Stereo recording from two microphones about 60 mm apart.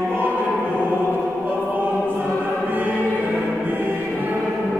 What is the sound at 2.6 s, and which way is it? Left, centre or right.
Music, right.